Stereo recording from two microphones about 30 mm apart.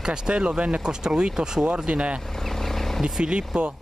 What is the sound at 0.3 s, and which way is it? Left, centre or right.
Speech, right.